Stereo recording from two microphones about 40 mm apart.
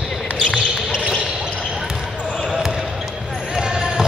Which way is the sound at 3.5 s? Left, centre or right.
Centre.